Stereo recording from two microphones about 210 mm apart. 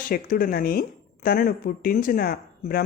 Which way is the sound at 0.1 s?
40° left (ahead or behind).